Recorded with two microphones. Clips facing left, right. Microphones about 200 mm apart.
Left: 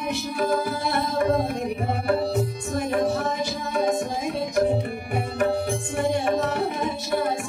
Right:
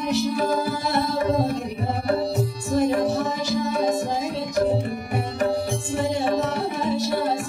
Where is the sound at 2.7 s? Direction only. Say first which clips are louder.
Right 7 dB; 55° left (ahead or behind).